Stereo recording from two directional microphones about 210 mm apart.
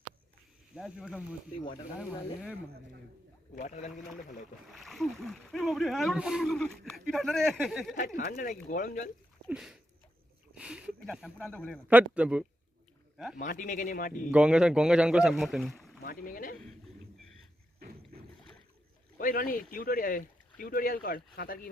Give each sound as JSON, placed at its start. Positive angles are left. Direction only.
{"t": 0.8, "sound": "speech", "side_deg": -5}
{"t": 3.5, "sound": "speech", "side_deg": 35}
{"t": 4.7, "sound": "speech", "side_deg": 0}
{"t": 7.9, "sound": "speech", "side_deg": 40}
{"t": 9.5, "sound": "speech", "side_deg": -5}
{"t": 11.4, "sound": "a man's voice", "side_deg": 5}
{"t": 11.9, "sound": "speech", "side_deg": -5}
{"t": 13.3, "sound": "speech", "side_deg": 40}
{"t": 14.3, "sound": "speech", "side_deg": -5}
{"t": 16.0, "sound": "speech", "side_deg": 40}
{"t": 19.2, "sound": "speech", "side_deg": 40}